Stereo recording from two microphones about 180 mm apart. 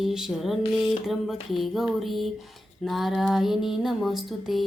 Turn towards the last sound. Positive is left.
turn(degrees=0)  # may be behind; listen again after turning